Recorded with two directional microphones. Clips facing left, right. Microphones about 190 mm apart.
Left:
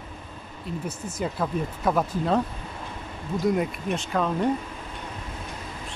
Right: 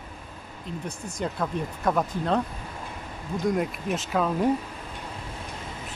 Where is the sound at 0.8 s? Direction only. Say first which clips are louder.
Left 1 dB; 5° left (ahead or behind).